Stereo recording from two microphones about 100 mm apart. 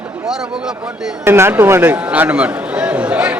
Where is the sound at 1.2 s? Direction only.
25° right (ahead or behind).